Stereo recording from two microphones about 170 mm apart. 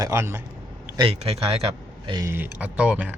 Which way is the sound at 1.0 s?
35° right (ahead or behind).